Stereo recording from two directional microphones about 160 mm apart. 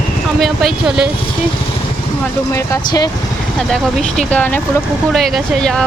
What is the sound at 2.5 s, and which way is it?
Speech, 20° left (ahead or behind).